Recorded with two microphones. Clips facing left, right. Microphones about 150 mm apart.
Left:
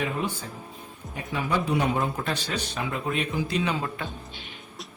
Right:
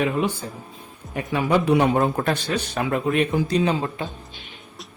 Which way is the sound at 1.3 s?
70° right (ahead or behind).